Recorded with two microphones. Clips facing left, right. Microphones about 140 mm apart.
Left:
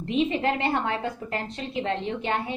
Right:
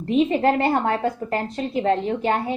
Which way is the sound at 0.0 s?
40° right (ahead or behind).